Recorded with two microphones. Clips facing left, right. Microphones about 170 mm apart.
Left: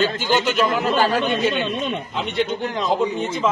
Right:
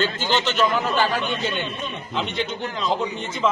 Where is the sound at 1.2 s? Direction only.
80° left.